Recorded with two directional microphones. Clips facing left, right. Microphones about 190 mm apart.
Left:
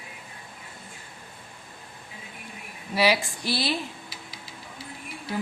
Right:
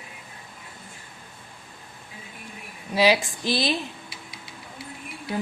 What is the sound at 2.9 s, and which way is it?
Speech, 20° right (ahead or behind).